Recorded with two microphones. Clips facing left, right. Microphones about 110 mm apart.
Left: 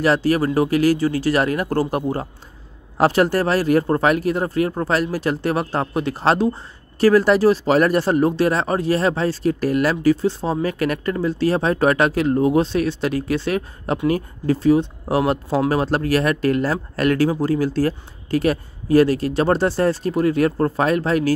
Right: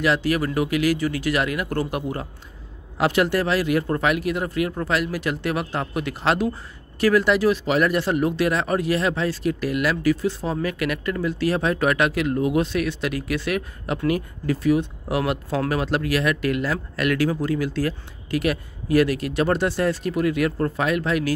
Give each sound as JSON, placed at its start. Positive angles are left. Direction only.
{"t": 0.0, "sound": "speech", "side_deg": 35}